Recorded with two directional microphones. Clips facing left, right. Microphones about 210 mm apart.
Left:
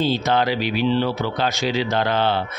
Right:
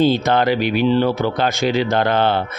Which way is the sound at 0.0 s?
55° right (ahead or behind).